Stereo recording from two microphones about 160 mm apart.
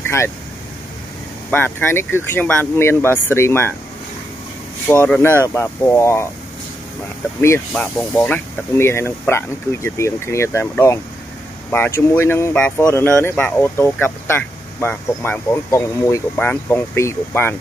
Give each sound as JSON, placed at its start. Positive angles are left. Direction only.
{"t": 0.0, "sound": "vehicle", "side_deg": 15}
{"t": 1.5, "sound": "speech", "side_deg": 15}
{"t": 4.8, "sound": "speech", "side_deg": 10}
{"t": 7.7, "sound": "speech", "side_deg": 10}